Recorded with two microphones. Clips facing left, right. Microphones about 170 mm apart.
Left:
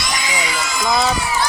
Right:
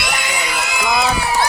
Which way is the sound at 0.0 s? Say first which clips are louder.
Even; 60° right (ahead or behind).